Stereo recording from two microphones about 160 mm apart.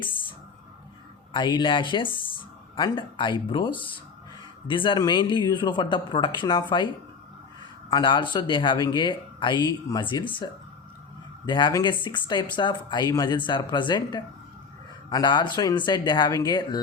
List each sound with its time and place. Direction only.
1.3 s speech: 30° left (ahead or behind)
7.9 s speech: 30° left (ahead or behind)